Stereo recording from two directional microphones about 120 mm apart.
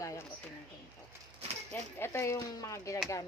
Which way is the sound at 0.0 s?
25° left (ahead or behind).